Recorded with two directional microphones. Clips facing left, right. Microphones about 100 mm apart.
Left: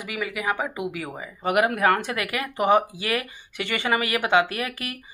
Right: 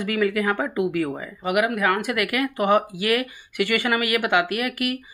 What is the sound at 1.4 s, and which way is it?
Speech, 35° left (ahead or behind).